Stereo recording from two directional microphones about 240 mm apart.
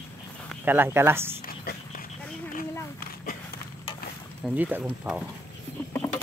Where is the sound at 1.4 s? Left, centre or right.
Left.